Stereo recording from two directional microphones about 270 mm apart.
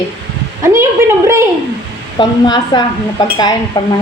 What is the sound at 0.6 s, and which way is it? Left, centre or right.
Speech, centre.